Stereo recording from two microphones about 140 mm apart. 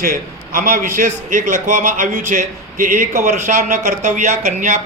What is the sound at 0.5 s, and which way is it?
A man's voice, 75° right (ahead or behind).